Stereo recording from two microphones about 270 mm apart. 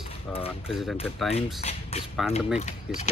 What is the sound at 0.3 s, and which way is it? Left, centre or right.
Speech, left.